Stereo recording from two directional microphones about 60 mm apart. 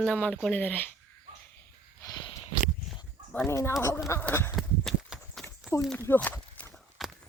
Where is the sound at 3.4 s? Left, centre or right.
Left.